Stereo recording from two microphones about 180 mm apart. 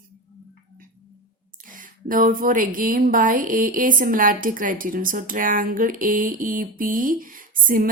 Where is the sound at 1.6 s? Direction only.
50° right (ahead or behind).